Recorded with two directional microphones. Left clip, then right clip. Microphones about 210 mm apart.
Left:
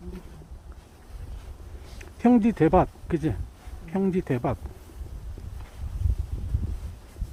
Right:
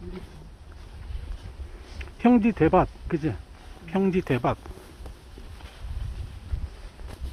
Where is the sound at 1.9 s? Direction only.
10° left (ahead or behind).